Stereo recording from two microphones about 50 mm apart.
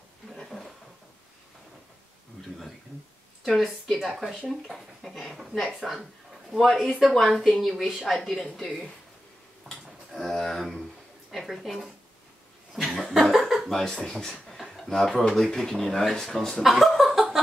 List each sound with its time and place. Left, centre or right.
0.5 s a sound: centre
3.4 s speech: centre
9.7 s a sound: centre
11.3 s speech: centre
12.7 s chuckle: centre
13.7 s speech: centre
16.6 s chuckle: centre